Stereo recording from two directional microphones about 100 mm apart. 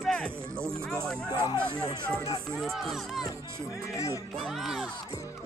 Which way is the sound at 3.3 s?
35° left (ahead or behind).